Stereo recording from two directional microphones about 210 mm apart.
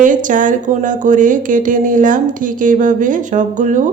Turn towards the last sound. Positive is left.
turn(degrees=-35)  # may be behind; listen again after turning